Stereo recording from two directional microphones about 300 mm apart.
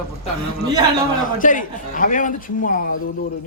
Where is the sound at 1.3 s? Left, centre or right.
Left.